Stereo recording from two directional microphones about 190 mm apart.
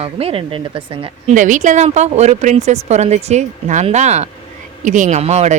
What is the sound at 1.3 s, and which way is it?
Speech, 40° right (ahead or behind).